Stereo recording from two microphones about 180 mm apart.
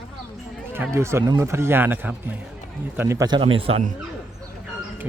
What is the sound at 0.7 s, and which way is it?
A man's voice, 15° right (ahead or behind).